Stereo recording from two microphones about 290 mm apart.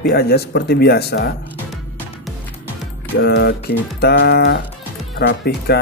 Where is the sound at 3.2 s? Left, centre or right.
Left.